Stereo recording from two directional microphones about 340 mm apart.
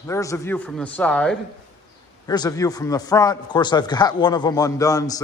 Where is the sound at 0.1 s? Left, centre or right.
Centre.